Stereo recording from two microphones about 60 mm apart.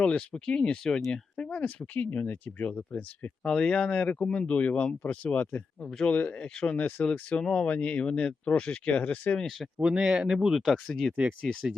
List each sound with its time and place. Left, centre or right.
0.0 s speech: centre
3.4 s speech: centre
9.7 s speech: centre